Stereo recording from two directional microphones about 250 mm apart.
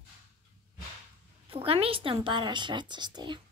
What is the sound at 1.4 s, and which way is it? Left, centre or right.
A woman's voice, right.